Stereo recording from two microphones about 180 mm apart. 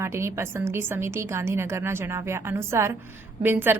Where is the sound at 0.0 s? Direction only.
15° right (ahead or behind).